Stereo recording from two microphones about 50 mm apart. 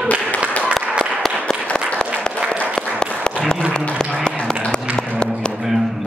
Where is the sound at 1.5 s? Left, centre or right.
Centre.